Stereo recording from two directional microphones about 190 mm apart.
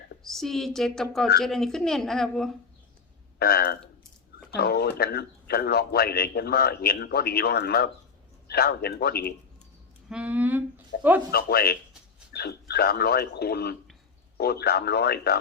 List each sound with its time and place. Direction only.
0.3 s a woman's voice: centre (ahead or behind)
3.3 s a man's voice: 55° left (ahead or behind)
10.1 s speech: 5° right (ahead or behind)
10.9 s a man's voice: 65° left (ahead or behind)